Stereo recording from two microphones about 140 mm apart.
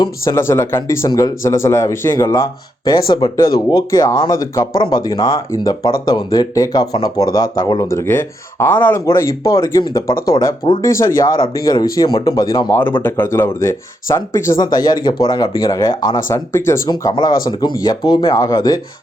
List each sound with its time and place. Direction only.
0.0 s speech: 20° left (ahead or behind)
13.0 s speech: 15° left (ahead or behind)